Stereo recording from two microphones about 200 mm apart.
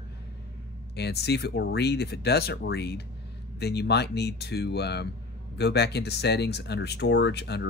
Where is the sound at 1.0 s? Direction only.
55° left (ahead or behind).